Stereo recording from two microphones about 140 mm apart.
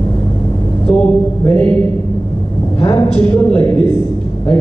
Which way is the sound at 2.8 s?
40° left (ahead or behind).